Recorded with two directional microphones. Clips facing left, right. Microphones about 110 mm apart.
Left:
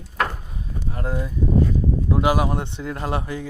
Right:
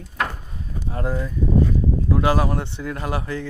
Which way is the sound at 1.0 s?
15° left (ahead or behind).